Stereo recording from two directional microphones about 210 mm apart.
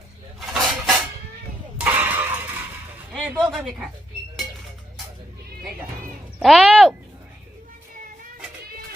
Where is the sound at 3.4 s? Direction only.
5° right (ahead or behind).